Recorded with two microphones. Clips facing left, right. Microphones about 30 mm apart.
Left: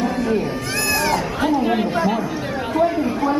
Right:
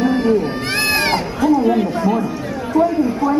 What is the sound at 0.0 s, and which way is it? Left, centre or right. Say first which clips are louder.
Cat: right 5 dB; right.